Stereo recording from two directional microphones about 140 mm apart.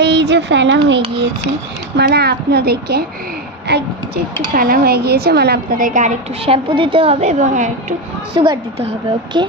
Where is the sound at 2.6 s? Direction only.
90° right.